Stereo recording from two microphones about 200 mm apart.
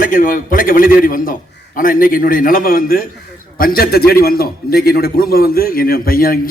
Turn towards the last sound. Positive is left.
turn(degrees=45)  # may be behind; listen again after turning